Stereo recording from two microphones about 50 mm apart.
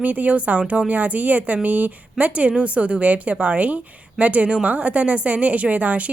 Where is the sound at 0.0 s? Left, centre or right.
Right.